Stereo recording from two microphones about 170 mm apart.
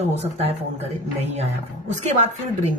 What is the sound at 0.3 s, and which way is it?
Speech, 35° right (ahead or behind).